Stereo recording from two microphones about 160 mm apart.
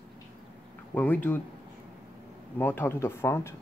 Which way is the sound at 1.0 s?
10° left (ahead or behind).